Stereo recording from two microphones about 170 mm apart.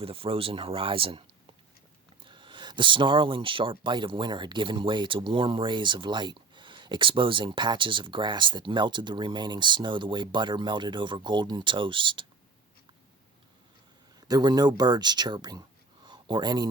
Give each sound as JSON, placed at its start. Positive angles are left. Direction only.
{"t": 0.0, "sound": "speech", "side_deg": -35}
{"t": 2.2, "sound": "speech", "side_deg": -30}
{"t": 14.2, "sound": "speech", "side_deg": -25}
{"t": 16.0, "sound": "a sound", "side_deg": -25}